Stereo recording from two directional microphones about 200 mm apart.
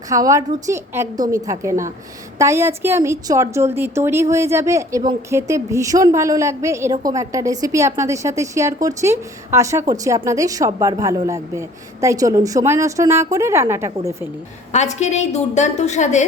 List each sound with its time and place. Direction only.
0.1 s a woman's voice: 15° right (ahead or behind)
14.7 s a woman's voice: 35° left (ahead or behind)